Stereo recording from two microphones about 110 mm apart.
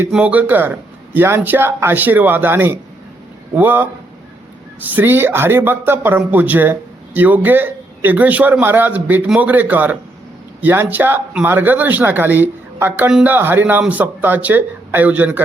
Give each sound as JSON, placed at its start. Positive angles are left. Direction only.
{"t": 0.1, "sound": "speech", "side_deg": -10}